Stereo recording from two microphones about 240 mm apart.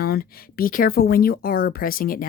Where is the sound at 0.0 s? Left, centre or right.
Left.